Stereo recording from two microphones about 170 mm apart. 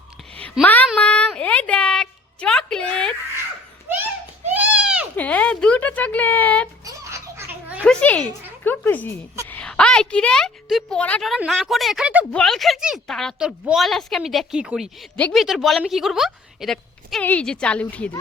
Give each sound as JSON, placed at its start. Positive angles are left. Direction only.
{"t": 0.6, "sound": "speech", "side_deg": 10}
{"t": 0.9, "sound": "a sound", "side_deg": 5}
{"t": 4.5, "sound": "goat", "side_deg": -10}
{"t": 5.1, "sound": "speech", "side_deg": 10}
{"t": 6.8, "sound": "a sound", "side_deg": -15}
{"t": 7.8, "sound": "a woman's voice", "side_deg": 5}